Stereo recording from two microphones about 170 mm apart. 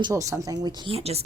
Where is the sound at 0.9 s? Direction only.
35° right (ahead or behind).